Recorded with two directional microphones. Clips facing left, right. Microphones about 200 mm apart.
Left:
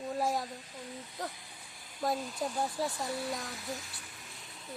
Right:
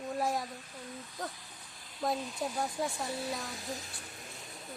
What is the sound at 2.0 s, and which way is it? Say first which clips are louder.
Speech: even; centre (ahead or behind).